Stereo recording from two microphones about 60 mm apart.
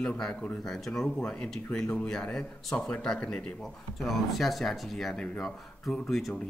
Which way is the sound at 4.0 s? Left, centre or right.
Centre.